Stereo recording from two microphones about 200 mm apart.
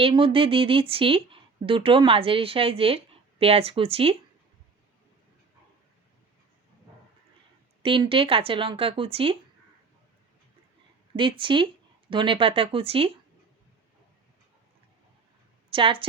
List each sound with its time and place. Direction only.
0.0 s speech: 25° right (ahead or behind)
7.8 s speech: 25° right (ahead or behind)
11.2 s speech: 25° right (ahead or behind)
15.7 s speech: 25° right (ahead or behind)